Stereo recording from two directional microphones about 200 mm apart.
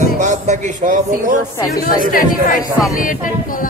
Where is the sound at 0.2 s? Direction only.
40° right (ahead or behind).